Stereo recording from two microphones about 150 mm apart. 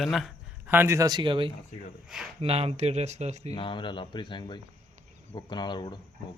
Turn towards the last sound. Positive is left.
turn(degrees=30)  # may be behind; listen again after turning